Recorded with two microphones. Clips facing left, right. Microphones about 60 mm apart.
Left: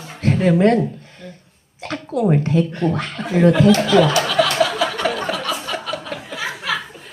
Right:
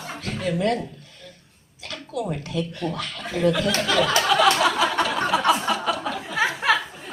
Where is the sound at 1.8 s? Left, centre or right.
Left.